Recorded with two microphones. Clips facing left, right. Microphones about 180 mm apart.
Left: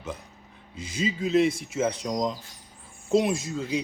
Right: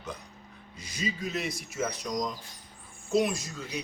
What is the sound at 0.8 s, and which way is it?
Speech, 25° left (ahead or behind).